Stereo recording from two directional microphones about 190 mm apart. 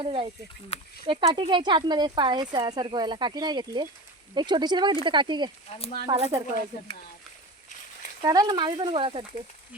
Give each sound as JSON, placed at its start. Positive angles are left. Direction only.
{"t": 0.0, "sound": "speech", "side_deg": -25}
{"t": 5.6, "sound": "speech", "side_deg": 30}
{"t": 6.1, "sound": "speech", "side_deg": -25}
{"t": 8.2, "sound": "speech", "side_deg": -20}